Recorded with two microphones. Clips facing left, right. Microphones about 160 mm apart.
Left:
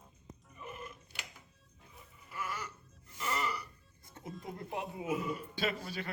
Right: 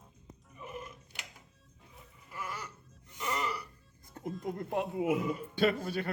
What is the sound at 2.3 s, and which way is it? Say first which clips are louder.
Music: left 1 dB; 15° right (ahead or behind).